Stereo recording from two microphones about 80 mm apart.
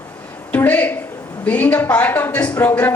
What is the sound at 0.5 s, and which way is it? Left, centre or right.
A woman's voice, left.